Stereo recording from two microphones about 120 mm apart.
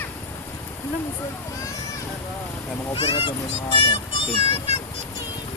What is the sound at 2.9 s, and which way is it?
A child's voice, 50° left (ahead or behind).